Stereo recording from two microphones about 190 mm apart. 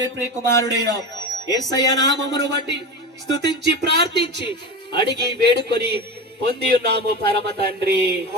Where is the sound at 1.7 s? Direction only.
20° left (ahead or behind).